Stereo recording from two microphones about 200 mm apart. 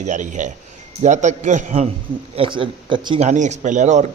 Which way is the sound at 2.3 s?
25° right (ahead or behind).